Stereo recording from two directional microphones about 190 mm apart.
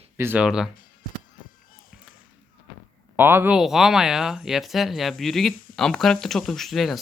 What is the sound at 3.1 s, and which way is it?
Speech, 10° right (ahead or behind).